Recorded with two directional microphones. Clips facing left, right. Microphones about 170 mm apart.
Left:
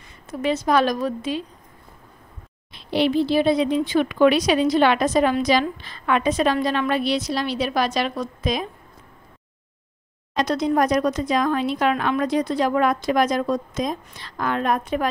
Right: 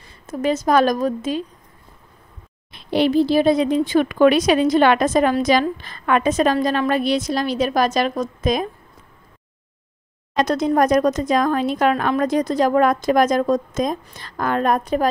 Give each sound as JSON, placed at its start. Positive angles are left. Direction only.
{"t": 0.3, "sound": "speech", "side_deg": -45}
{"t": 2.7, "sound": "speech", "side_deg": -45}
{"t": 10.4, "sound": "speech", "side_deg": -45}